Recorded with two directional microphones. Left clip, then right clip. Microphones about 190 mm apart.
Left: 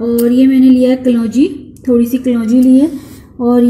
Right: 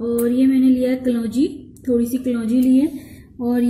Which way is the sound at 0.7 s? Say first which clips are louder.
Left 8 dB; 35° left (ahead or behind).